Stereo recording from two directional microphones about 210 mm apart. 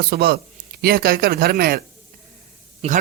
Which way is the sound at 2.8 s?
30° right (ahead or behind).